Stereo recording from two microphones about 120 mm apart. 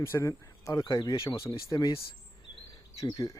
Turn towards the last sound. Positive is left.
turn(degrees=30)  # may be behind; listen again after turning